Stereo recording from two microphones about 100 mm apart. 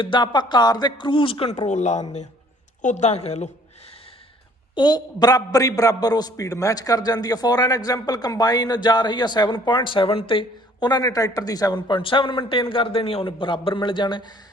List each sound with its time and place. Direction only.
0.0 s a man's voice: 50° left (ahead or behind); by 2.0 s 80° left
3.1 s a woman's voice: 90° left
4.7 s a man's voice: 45° left (ahead or behind)